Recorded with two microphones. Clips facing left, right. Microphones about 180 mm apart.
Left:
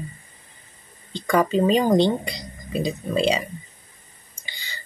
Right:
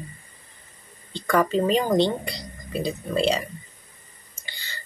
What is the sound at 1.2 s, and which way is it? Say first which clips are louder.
Speech: left 2 dB; 15° left (ahead or behind).